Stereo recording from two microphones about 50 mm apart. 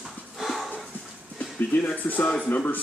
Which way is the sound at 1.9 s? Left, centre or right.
Left.